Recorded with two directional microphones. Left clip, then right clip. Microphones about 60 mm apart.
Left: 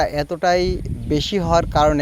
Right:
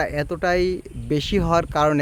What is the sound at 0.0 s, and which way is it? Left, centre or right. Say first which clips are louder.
Speech: left 4 dB; right.